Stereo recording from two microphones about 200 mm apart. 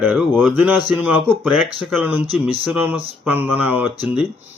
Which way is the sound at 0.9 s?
10° right (ahead or behind).